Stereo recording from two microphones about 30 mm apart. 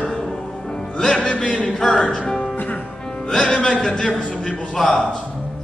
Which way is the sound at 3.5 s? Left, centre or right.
Left.